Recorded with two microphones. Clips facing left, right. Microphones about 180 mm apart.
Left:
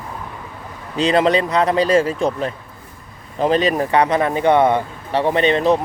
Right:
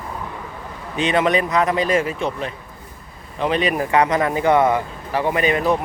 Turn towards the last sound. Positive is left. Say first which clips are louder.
# left 3 dB
turn(degrees=30)  # may be behind; listen again after turning